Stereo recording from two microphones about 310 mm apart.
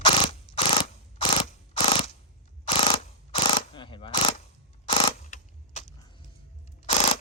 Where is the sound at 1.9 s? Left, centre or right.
Centre.